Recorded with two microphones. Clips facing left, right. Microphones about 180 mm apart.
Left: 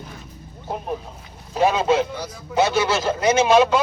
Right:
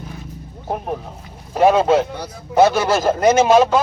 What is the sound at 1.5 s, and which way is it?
A man's voice, 50° right (ahead or behind).